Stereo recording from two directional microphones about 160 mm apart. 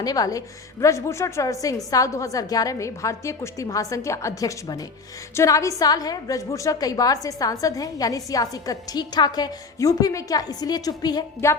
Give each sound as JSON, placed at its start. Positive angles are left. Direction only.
{"t": 0.0, "sound": "a woman's voice", "side_deg": 25}